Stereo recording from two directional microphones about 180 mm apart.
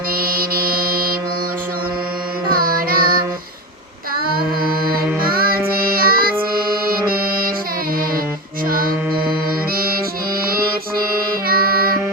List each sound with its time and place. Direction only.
0.2 s music: 55° right (ahead or behind)
2.5 s carnatic music: 55° right (ahead or behind)
5.2 s music: 55° right (ahead or behind)
9.7 s music: 55° right (ahead or behind)